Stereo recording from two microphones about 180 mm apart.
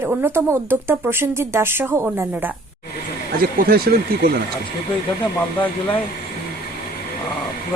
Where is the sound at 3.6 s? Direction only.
55° right (ahead or behind).